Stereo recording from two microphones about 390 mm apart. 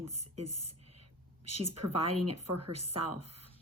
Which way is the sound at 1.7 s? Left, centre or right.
Right.